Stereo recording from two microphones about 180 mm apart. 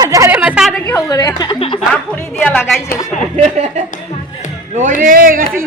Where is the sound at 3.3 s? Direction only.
40° right (ahead or behind).